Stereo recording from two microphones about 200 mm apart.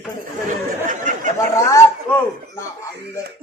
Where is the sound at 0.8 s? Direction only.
40° right (ahead or behind).